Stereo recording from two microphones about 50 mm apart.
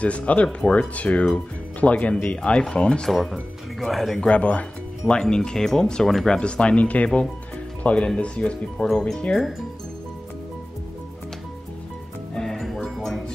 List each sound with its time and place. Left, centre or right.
0.0 s speech: left
3.1 s speech: centre
4.2 s speech: left
5.0 s speech: centre
6.3 s speech: left
12.4 s music: centre